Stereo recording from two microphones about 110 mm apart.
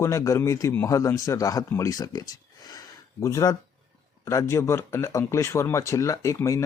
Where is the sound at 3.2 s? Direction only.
30° left (ahead or behind).